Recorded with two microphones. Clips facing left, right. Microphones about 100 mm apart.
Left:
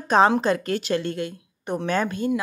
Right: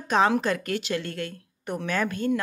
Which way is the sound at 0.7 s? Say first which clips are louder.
Left 4 dB; 40° left (ahead or behind).